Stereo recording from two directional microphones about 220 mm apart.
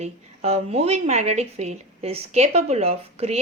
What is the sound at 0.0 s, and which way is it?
A woman's voice, 30° right (ahead or behind).